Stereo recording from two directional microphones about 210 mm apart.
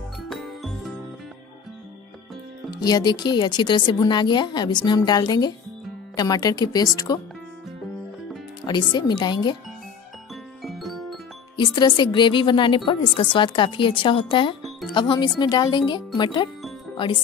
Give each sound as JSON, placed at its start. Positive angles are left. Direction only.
{"t": 0.3, "sound": "music", "side_deg": 0}
{"t": 2.7, "sound": "speech", "side_deg": 20}
{"t": 8.6, "sound": "speech", "side_deg": 20}
{"t": 10.6, "sound": "music", "side_deg": 0}
{"t": 11.5, "sound": "speech", "side_deg": 20}